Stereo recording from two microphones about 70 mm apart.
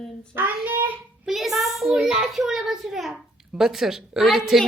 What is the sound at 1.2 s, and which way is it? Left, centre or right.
A child's voice, centre.